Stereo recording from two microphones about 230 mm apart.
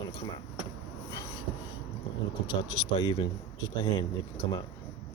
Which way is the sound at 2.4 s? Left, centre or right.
Centre.